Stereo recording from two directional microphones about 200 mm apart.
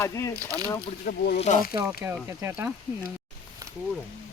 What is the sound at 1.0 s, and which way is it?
Speech, 50° left (ahead or behind).